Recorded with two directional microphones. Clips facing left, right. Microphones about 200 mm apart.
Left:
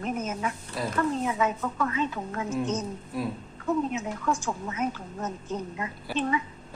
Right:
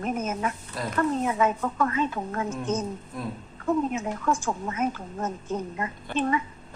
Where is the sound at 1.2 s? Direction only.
50° right (ahead or behind).